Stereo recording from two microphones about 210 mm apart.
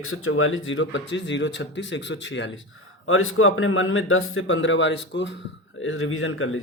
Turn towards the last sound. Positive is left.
turn(degrees=70)  # may be behind; listen again after turning